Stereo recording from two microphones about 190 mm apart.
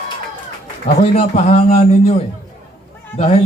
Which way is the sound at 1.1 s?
30° left (ahead or behind).